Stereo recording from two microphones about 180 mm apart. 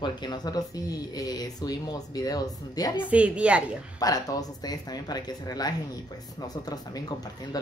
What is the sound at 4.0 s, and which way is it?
Speech, 20° left (ahead or behind).